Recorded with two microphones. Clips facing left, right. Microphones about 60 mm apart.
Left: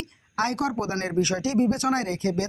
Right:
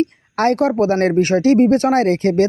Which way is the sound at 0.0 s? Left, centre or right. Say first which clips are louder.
Right 11 dB; right.